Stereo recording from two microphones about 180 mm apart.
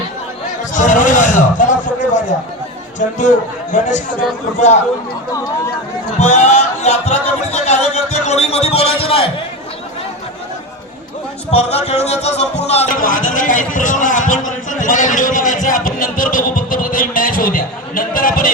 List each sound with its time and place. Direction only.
0.7 s a sound: 45° left (ahead or behind)
3.0 s a man's voice: 45° left (ahead or behind)
6.1 s speech: 40° left (ahead or behind)
11.5 s a man's voice: 35° left (ahead or behind)